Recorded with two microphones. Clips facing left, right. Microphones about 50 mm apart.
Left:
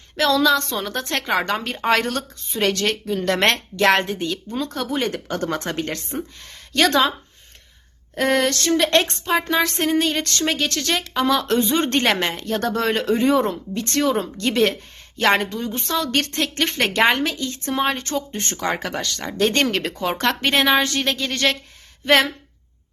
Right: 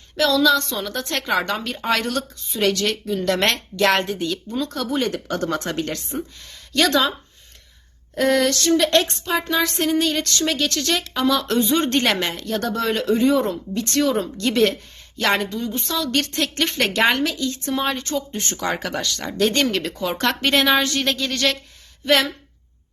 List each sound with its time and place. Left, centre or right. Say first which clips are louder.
0.2 s speech: even; left
1.1 s speech: even; centre
1.5 s speech: left 2 dB; left
8.1 s a woman's voice: right 1 dB; left
13.7 s speech: right 1 dB; left
15.4 s a woman's voice: even; left
16.3 s speech: even; left
17.9 s speech: even; left
18.3 s speech: even; left
19.7 s a woman's voice: left 1 dB; left
20.1 s a woman's voice: right 1 dB; left
22.0 s speech: left 2 dB; left